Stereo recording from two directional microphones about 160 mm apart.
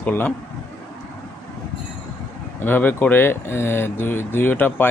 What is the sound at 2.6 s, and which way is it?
Speech, 10° left (ahead or behind).